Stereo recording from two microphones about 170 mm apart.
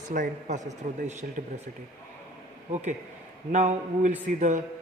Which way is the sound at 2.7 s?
40° right (ahead or behind).